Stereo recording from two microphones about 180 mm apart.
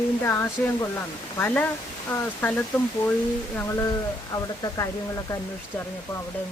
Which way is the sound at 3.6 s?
15° left (ahead or behind).